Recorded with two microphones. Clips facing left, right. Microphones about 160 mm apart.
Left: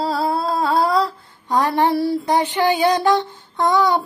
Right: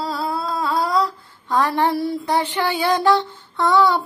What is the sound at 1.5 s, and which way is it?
Speech, 15° left (ahead or behind).